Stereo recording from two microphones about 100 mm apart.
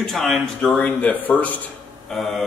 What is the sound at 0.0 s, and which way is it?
Speech, 5° left (ahead or behind).